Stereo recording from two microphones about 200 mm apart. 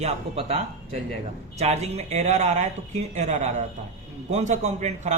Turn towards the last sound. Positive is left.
turn(degrees=-35)  # may be behind; listen again after turning